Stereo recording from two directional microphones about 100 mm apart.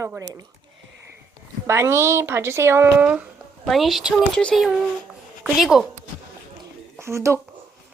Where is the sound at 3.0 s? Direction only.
10° right (ahead or behind).